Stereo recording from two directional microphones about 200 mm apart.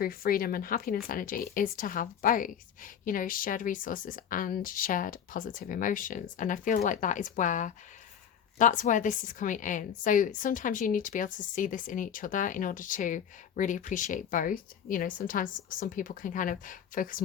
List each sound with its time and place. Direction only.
0.0 s a woman's voice: 45° left (ahead or behind)